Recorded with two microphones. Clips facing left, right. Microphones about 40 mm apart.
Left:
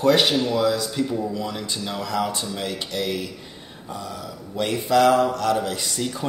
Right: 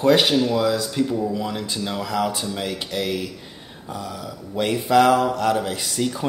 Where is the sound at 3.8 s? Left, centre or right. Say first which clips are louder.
Right 2 dB; centre.